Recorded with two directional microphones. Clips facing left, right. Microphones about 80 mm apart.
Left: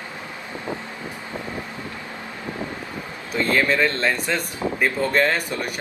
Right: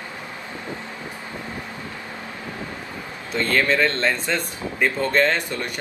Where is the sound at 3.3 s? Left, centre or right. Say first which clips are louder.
Even; centre.